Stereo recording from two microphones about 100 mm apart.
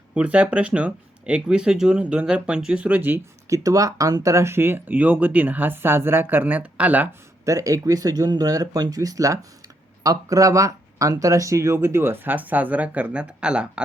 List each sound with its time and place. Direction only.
0.1 s speech: 15° right (ahead or behind)
3.5 s speech: 35° right (ahead or behind); by 7.1 s 15° right (ahead or behind)
7.4 s speech: 35° right (ahead or behind); by 13.8 s 10° right (ahead or behind)